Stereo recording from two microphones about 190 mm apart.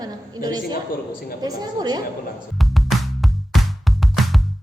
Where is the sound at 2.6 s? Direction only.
Centre (ahead or behind).